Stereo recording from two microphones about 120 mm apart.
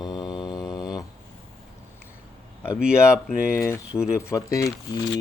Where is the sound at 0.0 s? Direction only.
35° left (ahead or behind).